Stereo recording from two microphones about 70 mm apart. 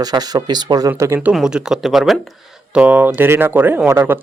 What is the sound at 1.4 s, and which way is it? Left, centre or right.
Speech, centre.